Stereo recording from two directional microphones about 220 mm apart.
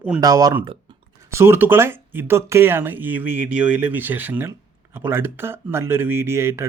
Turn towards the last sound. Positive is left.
turn(degrees=-10)  # may be behind; listen again after turning